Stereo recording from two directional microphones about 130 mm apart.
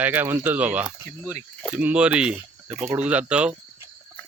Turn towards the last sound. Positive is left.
turn(degrees=-10)  # may be behind; listen again after turning